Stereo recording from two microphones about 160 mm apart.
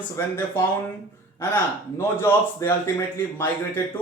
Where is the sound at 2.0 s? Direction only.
15° left (ahead or behind).